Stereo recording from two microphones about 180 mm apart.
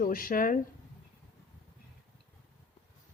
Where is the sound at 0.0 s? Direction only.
50° left (ahead or behind).